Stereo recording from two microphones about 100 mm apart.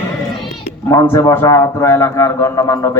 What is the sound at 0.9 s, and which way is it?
A man's voice, 30° left (ahead or behind).